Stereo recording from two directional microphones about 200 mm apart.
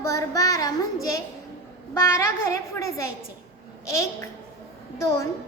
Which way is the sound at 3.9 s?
15° left (ahead or behind).